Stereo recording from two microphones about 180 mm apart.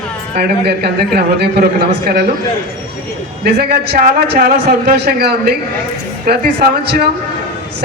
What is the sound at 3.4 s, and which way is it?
A man's voice, 60° right (ahead or behind).